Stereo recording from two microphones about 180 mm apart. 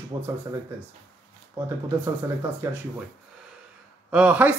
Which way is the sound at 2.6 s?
15° right (ahead or behind).